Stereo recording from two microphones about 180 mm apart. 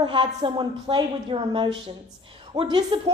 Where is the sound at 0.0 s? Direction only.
30° right (ahead or behind).